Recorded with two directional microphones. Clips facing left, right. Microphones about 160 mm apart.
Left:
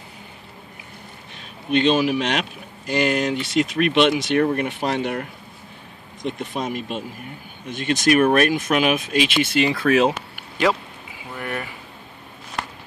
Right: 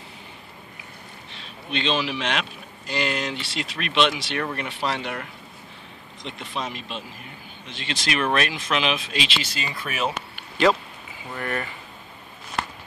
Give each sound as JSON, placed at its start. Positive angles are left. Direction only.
{"t": 1.3, "sound": "speech", "side_deg": 50}
{"t": 10.3, "sound": "rain on surface", "side_deg": 10}
{"t": 11.3, "sound": "speech", "side_deg": 10}